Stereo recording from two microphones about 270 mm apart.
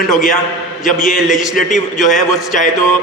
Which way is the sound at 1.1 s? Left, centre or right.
Centre.